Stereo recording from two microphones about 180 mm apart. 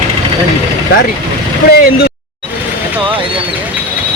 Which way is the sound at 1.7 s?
55° left (ahead or behind).